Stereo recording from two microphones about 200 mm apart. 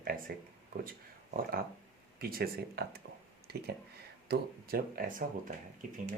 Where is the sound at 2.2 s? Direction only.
50° right (ahead or behind).